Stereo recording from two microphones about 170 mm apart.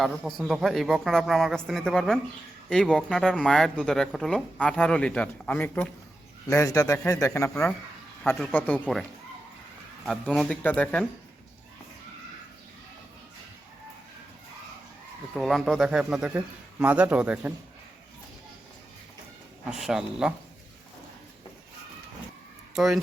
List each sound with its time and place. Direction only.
0.0 s a man's voice: centre (ahead or behind)
10.1 s speech: centre (ahead or behind)
15.4 s a man's voice: centre (ahead or behind)
19.7 s speech: 5° right (ahead or behind)
22.7 s speech: centre (ahead or behind)